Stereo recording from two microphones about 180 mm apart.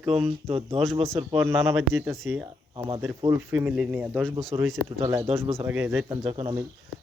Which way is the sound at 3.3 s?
10° right (ahead or behind).